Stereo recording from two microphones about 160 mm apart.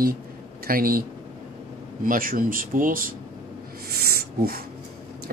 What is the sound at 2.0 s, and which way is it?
Speech, 60° right (ahead or behind).